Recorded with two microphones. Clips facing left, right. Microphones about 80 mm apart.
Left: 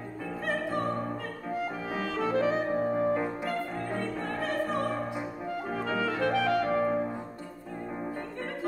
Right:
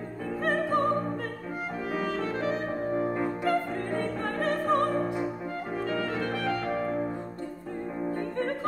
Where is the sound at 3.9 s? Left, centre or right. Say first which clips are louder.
Right 3 dB; right.